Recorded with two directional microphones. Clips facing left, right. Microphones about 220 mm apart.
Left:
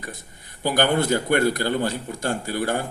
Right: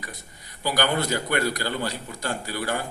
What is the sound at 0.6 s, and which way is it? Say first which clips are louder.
A man's voice: left 4 dB; 50° left (ahead or behind).